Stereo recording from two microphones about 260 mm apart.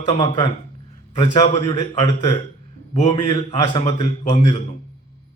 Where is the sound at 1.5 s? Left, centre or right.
Centre.